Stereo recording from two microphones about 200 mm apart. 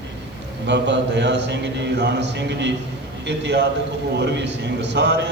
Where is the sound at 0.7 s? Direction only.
60° right (ahead or behind).